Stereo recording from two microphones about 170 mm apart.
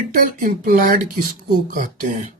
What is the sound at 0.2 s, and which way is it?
Speech, 55° right (ahead or behind).